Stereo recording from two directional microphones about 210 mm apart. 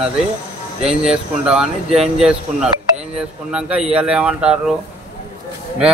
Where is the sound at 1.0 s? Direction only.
5° right (ahead or behind).